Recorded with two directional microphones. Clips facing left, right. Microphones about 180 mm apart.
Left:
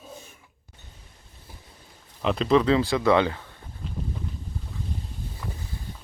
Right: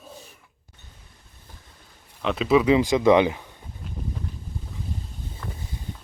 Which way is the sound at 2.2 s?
5° right (ahead or behind).